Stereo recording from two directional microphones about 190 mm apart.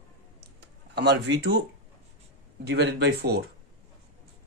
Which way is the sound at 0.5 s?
60° right (ahead or behind).